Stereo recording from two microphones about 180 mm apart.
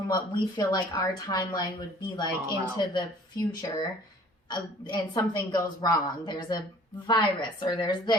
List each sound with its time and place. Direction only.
0.1 s speech: 25° left (ahead or behind)